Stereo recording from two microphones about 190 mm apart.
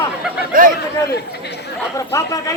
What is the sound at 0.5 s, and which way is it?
Speech, 45° right (ahead or behind).